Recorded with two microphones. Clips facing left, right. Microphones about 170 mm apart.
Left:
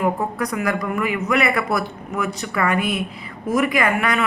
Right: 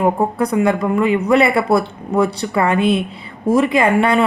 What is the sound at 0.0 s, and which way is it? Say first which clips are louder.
Speech: right 5 dB; 30° right (ahead or behind).